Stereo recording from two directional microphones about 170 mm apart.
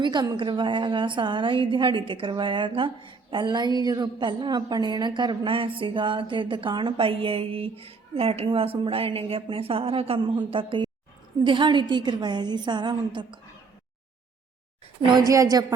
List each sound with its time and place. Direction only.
0.0 s a woman's voice: 25° right (ahead or behind)
15.0 s a woman's voice: 25° right (ahead or behind)